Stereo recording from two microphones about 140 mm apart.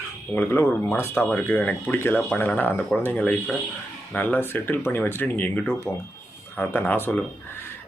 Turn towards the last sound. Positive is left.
turn(degrees=15)  # may be behind; listen again after turning